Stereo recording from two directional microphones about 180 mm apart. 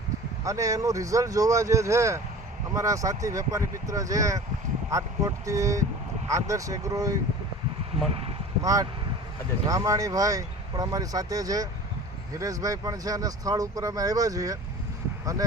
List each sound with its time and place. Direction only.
0.4 s speech: 15° right (ahead or behind)
8.6 s speech: 20° right (ahead or behind)